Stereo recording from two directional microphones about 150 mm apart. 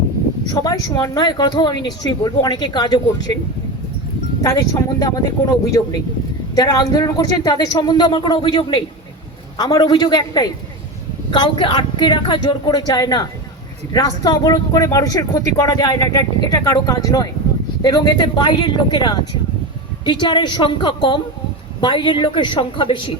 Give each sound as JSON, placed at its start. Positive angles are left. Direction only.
{"t": 0.4, "sound": "speech", "side_deg": 25}
{"t": 4.4, "sound": "speech", "side_deg": 25}